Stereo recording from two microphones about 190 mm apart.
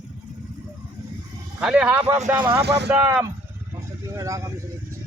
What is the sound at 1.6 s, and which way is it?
Speech, 5° right (ahead or behind).